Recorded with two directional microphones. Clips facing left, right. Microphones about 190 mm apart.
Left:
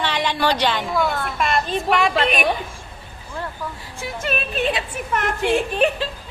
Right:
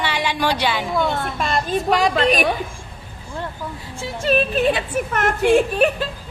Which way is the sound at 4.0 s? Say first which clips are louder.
Right 6 dB; 30° right (ahead or behind).